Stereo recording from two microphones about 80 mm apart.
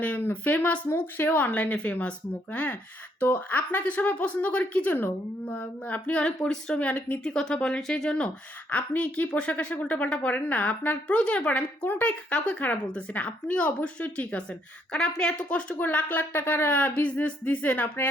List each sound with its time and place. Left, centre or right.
0.0 s a woman's voice: left